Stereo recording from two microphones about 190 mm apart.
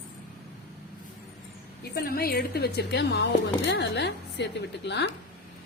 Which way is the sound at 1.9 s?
50° left (ahead or behind).